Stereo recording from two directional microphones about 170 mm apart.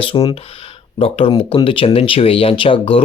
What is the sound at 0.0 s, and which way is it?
Speech, 30° left (ahead or behind).